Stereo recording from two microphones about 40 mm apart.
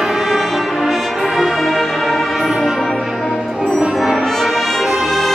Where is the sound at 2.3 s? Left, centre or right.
Centre.